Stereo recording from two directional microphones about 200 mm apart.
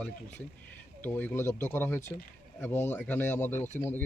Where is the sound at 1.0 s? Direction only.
10° left (ahead or behind).